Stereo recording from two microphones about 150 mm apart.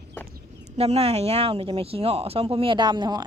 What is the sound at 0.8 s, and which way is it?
Speech, 45° right (ahead or behind).